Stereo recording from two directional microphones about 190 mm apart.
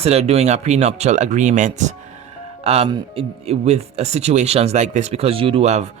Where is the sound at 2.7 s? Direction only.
30° right (ahead or behind).